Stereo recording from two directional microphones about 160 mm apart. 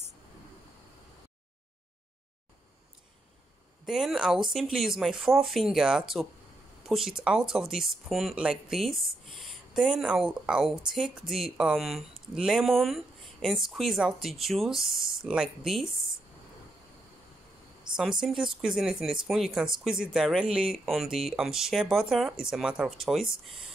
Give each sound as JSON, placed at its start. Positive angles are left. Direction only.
{"t": 3.8, "sound": "speech", "side_deg": -5}
{"t": 17.9, "sound": "a sound", "side_deg": -30}
{"t": 18.2, "sound": "speech", "side_deg": -5}